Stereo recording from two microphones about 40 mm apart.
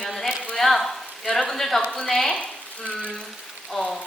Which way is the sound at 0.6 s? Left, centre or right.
Centre.